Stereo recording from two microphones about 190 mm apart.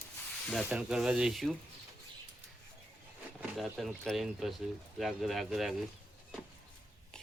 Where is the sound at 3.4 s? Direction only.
Centre (ahead or behind).